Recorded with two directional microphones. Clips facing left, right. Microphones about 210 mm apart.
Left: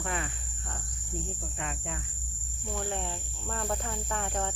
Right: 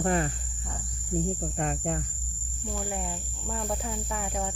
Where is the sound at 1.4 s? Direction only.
45° right (ahead or behind).